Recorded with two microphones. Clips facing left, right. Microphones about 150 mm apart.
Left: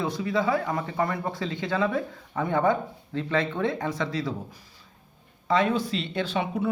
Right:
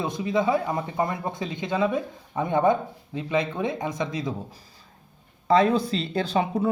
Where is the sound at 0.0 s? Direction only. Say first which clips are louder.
Right 2 dB; 20° right (ahead or behind).